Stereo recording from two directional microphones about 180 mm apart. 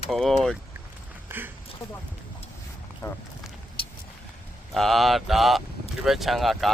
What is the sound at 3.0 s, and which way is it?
Speech, 20° left (ahead or behind).